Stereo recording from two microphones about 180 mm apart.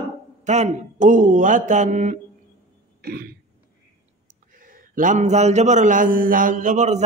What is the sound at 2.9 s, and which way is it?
Throat clearing, 60° right (ahead or behind).